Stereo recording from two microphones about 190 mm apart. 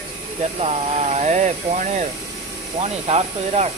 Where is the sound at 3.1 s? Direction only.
35° right (ahead or behind).